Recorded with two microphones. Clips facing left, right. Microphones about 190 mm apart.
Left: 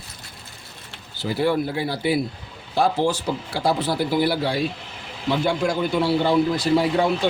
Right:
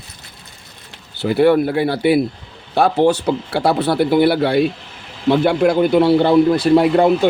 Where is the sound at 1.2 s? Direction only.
65° right (ahead or behind).